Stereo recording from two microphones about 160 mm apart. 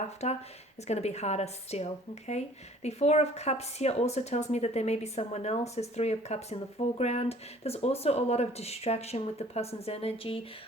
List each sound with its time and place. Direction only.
0.2 s a woman's voice: 45° left (ahead or behind)